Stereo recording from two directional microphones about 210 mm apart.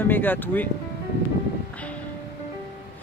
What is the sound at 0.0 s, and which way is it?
Speech, 10° left (ahead or behind).